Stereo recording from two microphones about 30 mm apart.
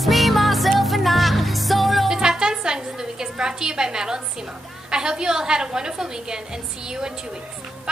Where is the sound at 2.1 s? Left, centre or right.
Right.